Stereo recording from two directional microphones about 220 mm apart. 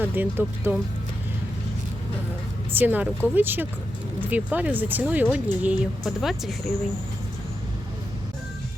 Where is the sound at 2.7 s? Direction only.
5° right (ahead or behind).